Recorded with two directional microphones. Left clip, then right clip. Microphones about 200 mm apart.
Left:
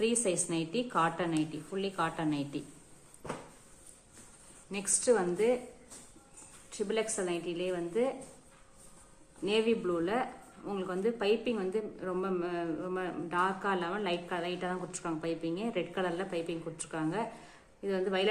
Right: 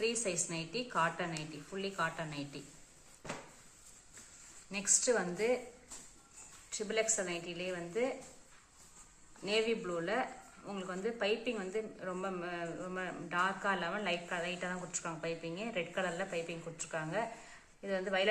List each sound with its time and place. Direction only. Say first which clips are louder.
0.0 s a woman's voice: left 5 dB; 55° left (ahead or behind)
4.7 s a woman's voice: left 3 dB; 45° left (ahead or behind)
6.7 s a woman's voice: left 2 dB; 45° left (ahead or behind)
9.5 s a woman's voice: left 4 dB; 45° left (ahead or behind)